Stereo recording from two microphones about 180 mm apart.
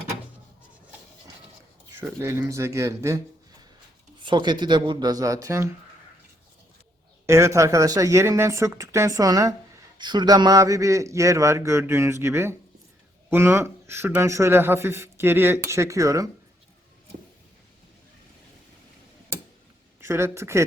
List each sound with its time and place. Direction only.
2.0 s a man's voice: 15° right (ahead or behind)
4.2 s a man's voice: 25° right (ahead or behind)
7.3 s a man's voice: 15° right (ahead or behind)
20.0 s a man's voice: 15° right (ahead or behind)